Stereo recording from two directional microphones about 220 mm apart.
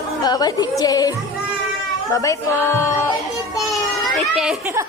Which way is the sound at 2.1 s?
15° left (ahead or behind).